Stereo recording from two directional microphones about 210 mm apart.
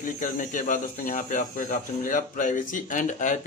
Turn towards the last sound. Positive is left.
turn(degrees=40)  # may be behind; listen again after turning